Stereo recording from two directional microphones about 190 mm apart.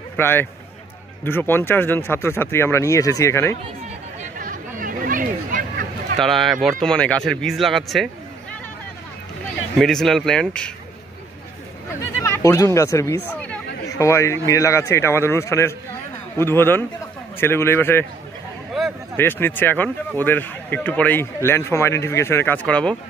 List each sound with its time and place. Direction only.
0.2 s speech: 10° left (ahead or behind)
4.4 s a sound: 45° right (ahead or behind)
6.1 s speech: centre (ahead or behind)
9.8 s speech: centre (ahead or behind)
12.2 s speech: 15° left (ahead or behind)
19.1 s speech: 10° left (ahead or behind)